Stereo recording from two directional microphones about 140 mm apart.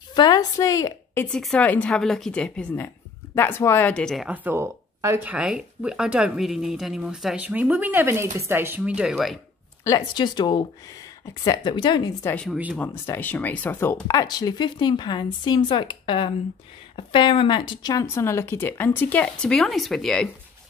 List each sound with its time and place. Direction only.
0.1 s a woman's voice: 30° left (ahead or behind)
1.2 s speech: 5° left (ahead or behind)
4.3 s speech: 15° right (ahead or behind)
9.8 s speech: 30° left (ahead or behind)
12.2 s speech: 15° left (ahead or behind)
14.0 s speech: 25° left (ahead or behind)
18.0 s speech: 20° left (ahead or behind); by 20.2 s 5° left (ahead or behind)